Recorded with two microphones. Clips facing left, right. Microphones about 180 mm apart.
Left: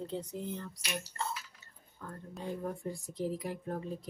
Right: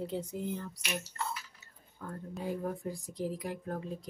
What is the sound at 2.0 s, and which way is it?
Speech, 10° right (ahead or behind).